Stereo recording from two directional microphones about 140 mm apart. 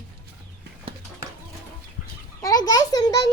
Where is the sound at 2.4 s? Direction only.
25° left (ahead or behind).